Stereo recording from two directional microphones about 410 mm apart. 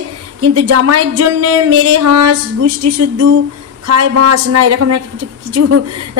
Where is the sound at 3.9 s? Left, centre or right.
Right.